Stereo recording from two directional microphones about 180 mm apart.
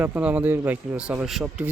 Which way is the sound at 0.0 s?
10° right (ahead or behind).